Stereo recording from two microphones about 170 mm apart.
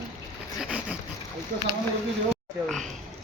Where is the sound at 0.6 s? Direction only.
5° right (ahead or behind).